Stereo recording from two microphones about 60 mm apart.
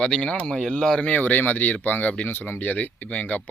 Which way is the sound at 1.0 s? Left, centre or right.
Left.